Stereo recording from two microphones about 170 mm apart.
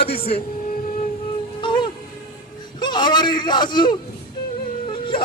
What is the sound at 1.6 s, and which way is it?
Music, 30° left (ahead or behind).